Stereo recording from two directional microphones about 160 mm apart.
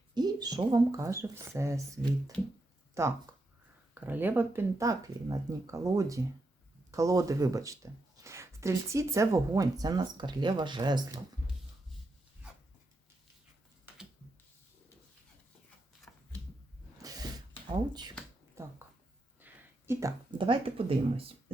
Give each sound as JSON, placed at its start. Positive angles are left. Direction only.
{"t": 0.1, "sound": "speech", "side_deg": -25}
{"t": 2.3, "sound": "speech", "side_deg": 5}
{"t": 3.0, "sound": "speech", "side_deg": -20}
{"t": 16.1, "sound": "a sound", "side_deg": 10}
{"t": 17.0, "sound": "a sound", "side_deg": -25}
{"t": 18.6, "sound": "speech", "side_deg": -15}
{"t": 19.4, "sound": "a sound", "side_deg": -10}
{"t": 19.9, "sound": "speech", "side_deg": -20}
{"t": 20.4, "sound": "speech", "side_deg": -35}